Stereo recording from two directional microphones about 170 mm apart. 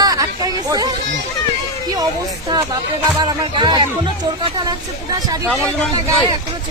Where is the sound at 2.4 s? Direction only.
20° right (ahead or behind).